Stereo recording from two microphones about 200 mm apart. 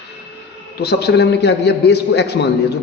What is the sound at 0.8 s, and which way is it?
A man's voice, 55° left (ahead or behind).